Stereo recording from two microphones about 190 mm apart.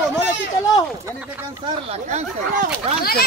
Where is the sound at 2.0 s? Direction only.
40° right (ahead or behind).